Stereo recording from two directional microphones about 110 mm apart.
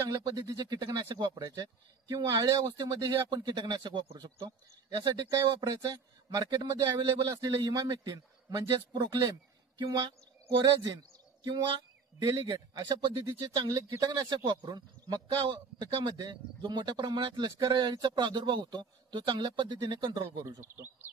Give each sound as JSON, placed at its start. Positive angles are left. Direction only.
{"t": 0.5, "sound": "a man's voice", "side_deg": -35}